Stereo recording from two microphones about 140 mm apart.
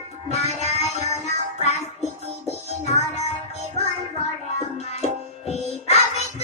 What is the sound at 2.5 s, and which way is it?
Music, 50° left (ahead or behind).